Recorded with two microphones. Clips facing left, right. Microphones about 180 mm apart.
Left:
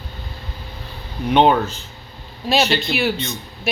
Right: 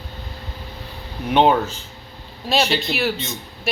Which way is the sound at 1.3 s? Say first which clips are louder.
Left 1 dB; 5° right (ahead or behind).